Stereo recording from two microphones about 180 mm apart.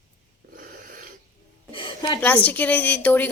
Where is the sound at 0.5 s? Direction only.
50° right (ahead or behind).